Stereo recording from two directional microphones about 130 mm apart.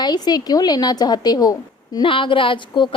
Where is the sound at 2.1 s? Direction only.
40° left (ahead or behind).